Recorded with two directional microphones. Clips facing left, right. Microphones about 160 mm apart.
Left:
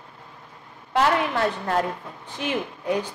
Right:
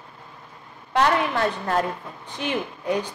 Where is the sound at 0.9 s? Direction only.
5° left (ahead or behind).